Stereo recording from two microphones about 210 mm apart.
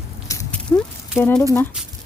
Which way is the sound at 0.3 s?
15° left (ahead or behind).